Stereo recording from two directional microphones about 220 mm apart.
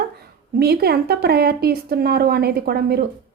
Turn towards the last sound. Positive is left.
turn(degrees=-45)  # may be behind; listen again after turning